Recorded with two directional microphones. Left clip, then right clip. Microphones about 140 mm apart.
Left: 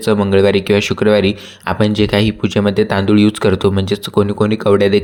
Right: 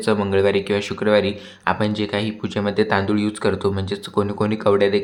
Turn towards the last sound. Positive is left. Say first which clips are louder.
# left 5 dB
turn(degrees=40)  # may be behind; listen again after turning